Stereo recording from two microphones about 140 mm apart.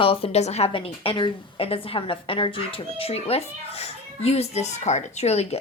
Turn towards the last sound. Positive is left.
turn(degrees=50)  # may be behind; listen again after turning